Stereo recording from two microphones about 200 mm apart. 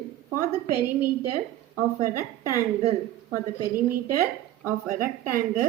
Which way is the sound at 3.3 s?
45° right (ahead or behind).